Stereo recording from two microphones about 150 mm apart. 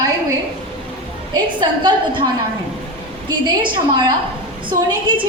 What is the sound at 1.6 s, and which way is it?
Speech, 30° right (ahead or behind).